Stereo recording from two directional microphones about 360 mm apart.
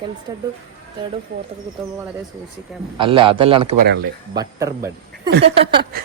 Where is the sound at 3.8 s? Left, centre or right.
Right.